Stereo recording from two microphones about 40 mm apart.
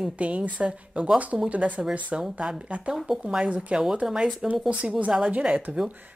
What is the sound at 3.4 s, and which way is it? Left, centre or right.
Speech, right.